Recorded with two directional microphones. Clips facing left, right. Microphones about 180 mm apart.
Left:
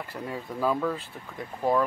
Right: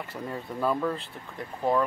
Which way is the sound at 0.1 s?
5° left (ahead or behind).